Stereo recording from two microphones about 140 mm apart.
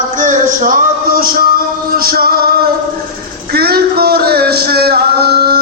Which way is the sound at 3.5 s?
90° right.